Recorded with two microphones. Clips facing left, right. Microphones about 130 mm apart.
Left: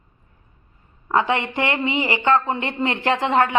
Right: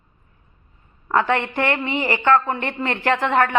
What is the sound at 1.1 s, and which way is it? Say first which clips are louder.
Speech: right 1 dB; 15° left (ahead or behind).